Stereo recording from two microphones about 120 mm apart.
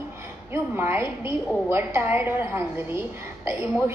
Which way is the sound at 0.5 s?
20° right (ahead or behind).